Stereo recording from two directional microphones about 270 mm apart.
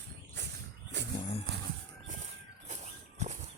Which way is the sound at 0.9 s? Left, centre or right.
Right.